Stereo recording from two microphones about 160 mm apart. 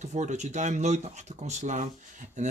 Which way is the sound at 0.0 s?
50° right (ahead or behind).